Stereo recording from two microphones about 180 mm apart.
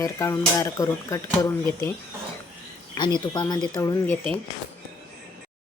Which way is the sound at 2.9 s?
25° left (ahead or behind).